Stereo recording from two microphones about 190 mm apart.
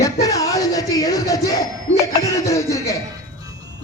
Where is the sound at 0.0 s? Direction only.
15° left (ahead or behind).